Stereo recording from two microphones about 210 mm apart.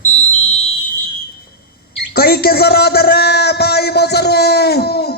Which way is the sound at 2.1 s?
45° left (ahead or behind).